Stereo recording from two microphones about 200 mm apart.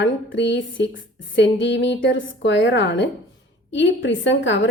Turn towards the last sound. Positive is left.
turn(degrees=65)  # may be behind; listen again after turning